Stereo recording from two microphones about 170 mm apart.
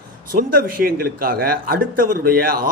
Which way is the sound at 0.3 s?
60° right (ahead or behind).